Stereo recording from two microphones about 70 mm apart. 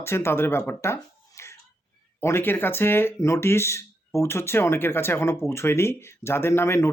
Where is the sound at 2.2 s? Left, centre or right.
Left.